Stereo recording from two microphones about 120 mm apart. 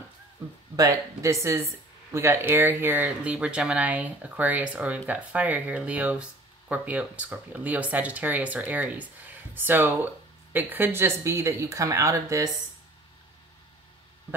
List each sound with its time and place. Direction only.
0.7 s speech: 30° right (ahead or behind)